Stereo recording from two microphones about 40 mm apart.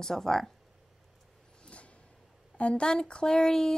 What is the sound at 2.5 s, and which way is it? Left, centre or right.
Speech, left.